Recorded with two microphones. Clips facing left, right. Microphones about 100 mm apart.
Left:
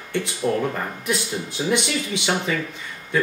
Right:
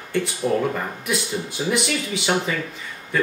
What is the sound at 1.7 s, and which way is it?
Speech, centre (ahead or behind).